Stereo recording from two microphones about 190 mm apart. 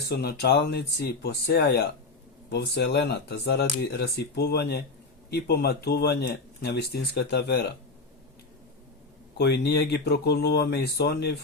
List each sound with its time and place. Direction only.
0.1 s speech: 55° left (ahead or behind)
9.4 s speech: 60° left (ahead or behind)